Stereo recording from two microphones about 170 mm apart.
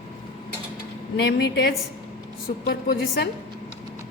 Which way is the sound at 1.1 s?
75° left (ahead or behind).